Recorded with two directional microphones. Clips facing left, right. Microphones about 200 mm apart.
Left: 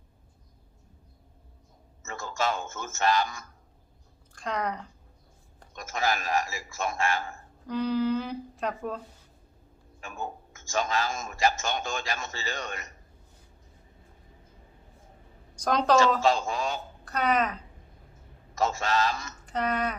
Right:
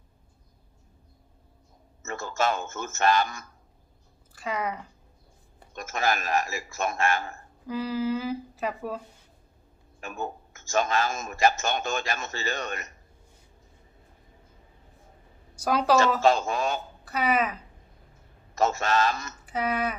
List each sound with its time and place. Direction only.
2.0 s a man's voice: 55° right (ahead or behind)
4.4 s speech: 5° right (ahead or behind)
5.7 s a man's voice: 60° right (ahead or behind)
7.7 s speech: 5° right (ahead or behind)
10.0 s a man's voice: 60° right (ahead or behind)
15.5 s speech: 5° right (ahead or behind)
16.2 s a man's voice: 55° right (ahead or behind)
17.1 s speech: 5° right (ahead or behind)
18.6 s a man's voice: 55° right (ahead or behind)
19.5 s speech: 5° right (ahead or behind)